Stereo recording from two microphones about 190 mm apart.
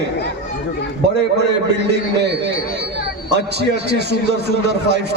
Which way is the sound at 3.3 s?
60° right (ahead or behind).